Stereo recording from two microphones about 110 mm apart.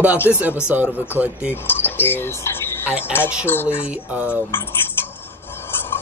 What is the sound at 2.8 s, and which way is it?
Speech, 10° right (ahead or behind).